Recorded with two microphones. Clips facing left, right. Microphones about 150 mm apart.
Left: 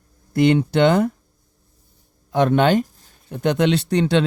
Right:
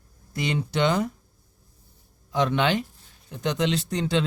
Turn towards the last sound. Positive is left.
turn(degrees=70)  # may be behind; listen again after turning